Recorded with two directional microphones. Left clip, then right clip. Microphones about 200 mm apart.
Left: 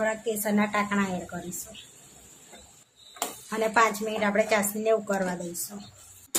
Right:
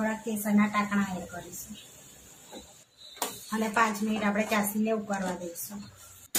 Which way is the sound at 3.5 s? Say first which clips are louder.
Left 4 dB; 50° left (ahead or behind).